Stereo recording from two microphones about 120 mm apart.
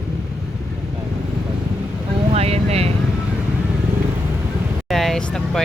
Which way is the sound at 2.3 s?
60° right (ahead or behind).